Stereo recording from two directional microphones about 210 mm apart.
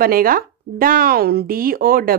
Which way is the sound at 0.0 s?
45° right (ahead or behind).